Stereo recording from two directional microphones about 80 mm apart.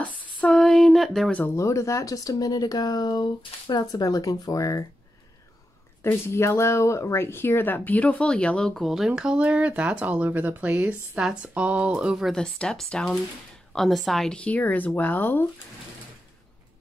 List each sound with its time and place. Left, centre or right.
0.0 s a sound: centre
1.5 s speech: left
3.9 s speech: left
6.0 s speech: left; by 12.3 s centre
12.3 s speech: centre; by 15.4 s left